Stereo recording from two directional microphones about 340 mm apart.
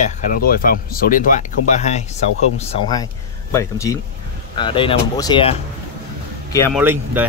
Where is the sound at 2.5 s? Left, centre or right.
Centre.